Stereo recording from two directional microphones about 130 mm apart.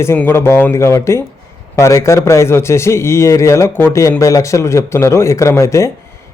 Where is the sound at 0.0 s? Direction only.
15° left (ahead or behind).